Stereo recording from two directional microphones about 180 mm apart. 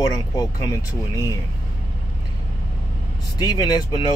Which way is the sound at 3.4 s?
20° left (ahead or behind).